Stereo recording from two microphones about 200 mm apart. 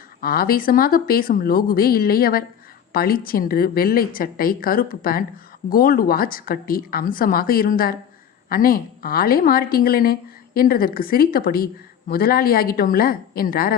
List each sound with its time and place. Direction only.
0.2 s a woman's voice: 50° left (ahead or behind)